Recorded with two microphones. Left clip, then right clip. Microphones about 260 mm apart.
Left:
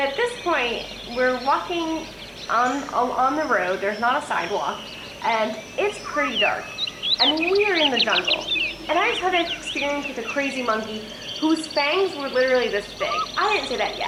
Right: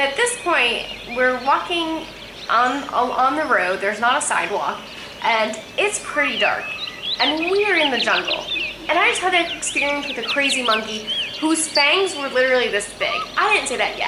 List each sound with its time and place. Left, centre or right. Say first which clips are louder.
0.0 s a sound: right 3 dB; centre
1.2 s speech: right 3 dB; centre
5.4 s speech: right 3 dB; centre